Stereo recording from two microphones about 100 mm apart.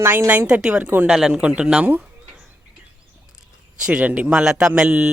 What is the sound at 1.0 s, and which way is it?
Speech, 5° right (ahead or behind).